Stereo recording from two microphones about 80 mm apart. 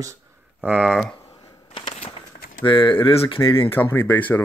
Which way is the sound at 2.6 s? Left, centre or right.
Left.